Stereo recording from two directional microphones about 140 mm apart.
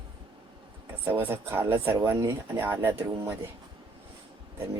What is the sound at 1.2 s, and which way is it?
Speech, 15° right (ahead or behind).